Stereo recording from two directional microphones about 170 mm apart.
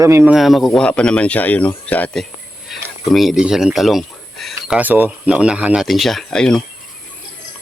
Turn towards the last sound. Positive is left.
turn(degrees=5)  # may be behind; listen again after turning